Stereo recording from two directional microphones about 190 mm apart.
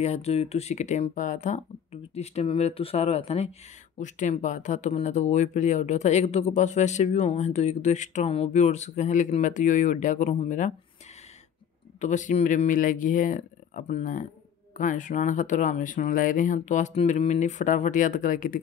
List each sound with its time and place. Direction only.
0.0 s speech: 35° left (ahead or behind)
12.0 s speech: 40° left (ahead or behind)